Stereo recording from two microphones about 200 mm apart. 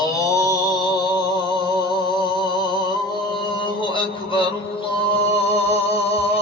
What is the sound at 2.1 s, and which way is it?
Music, 20° left (ahead or behind).